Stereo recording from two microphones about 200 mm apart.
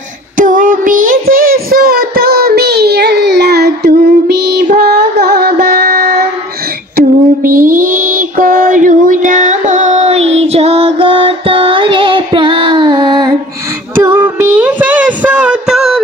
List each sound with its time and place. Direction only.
0.4 s child singing: 40° right (ahead or behind)
7.0 s a sound: 45° right (ahead or behind); by 13.4 s 20° right (ahead or behind)
13.9 s music: 10° right (ahead or behind)